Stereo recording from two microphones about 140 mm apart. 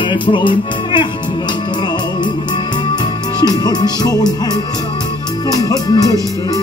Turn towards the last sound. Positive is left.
turn(degrees=25)  # may be behind; listen again after turning